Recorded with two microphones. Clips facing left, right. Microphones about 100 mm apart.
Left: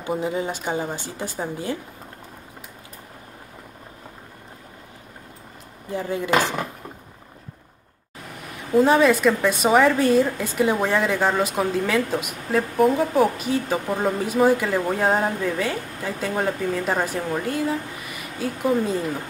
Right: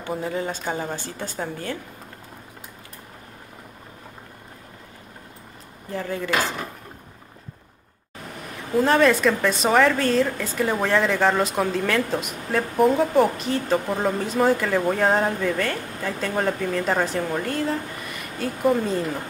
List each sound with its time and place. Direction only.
0.0 s a woman's voice: 15° left (ahead or behind)
5.9 s a woman's voice: 20° left (ahead or behind)
8.7 s a woman's voice: 5° left (ahead or behind)